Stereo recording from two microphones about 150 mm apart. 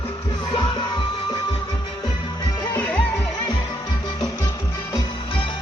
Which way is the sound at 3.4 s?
30° left (ahead or behind).